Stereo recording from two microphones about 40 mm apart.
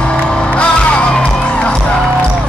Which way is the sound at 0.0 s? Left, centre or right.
Left.